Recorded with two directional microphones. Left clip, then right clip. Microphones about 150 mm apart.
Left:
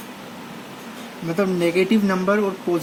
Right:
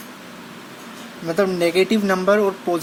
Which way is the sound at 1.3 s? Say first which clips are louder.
Right 2 dB; 40° right (ahead or behind).